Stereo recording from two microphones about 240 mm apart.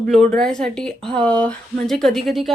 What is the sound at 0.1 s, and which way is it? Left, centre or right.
Speech, centre.